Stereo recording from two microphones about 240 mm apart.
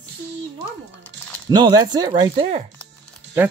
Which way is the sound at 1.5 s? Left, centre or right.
Centre.